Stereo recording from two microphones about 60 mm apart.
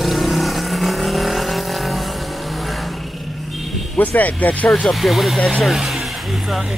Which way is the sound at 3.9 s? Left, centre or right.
Left.